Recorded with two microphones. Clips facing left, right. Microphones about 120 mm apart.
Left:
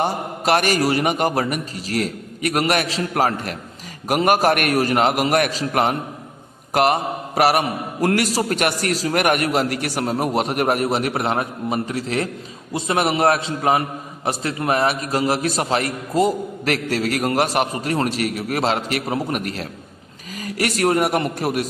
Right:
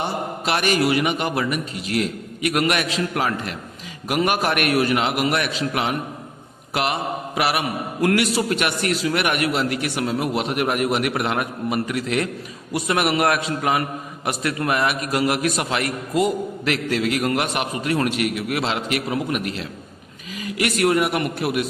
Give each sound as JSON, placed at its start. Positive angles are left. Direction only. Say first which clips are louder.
{"t": 0.0, "sound": "a man's voice", "louder": "left 3 dB", "side_deg": 45}